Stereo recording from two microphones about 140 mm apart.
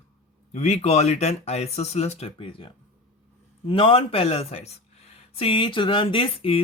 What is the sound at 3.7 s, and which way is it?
Speech, 40° left (ahead or behind).